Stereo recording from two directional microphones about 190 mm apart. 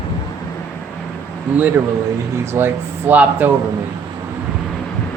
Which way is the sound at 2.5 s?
10° right (ahead or behind).